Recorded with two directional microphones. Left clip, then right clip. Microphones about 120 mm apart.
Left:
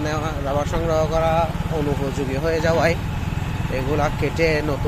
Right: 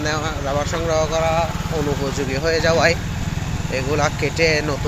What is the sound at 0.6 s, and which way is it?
Speech, 25° left (ahead or behind).